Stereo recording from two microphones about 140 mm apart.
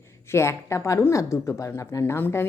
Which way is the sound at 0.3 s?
20° left (ahead or behind).